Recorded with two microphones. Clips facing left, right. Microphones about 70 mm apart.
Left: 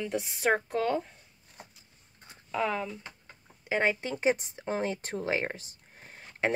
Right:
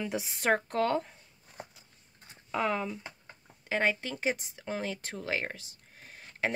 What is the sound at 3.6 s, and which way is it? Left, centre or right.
Speech, centre.